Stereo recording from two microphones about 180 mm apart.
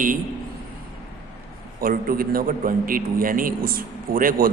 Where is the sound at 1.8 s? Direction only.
55° right (ahead or behind).